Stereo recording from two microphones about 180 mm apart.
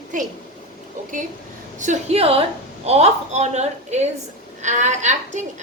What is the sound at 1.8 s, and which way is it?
A woman's voice, 40° right (ahead or behind).